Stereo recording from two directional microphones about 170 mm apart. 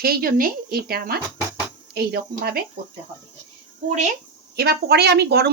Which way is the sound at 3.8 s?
40° right (ahead or behind).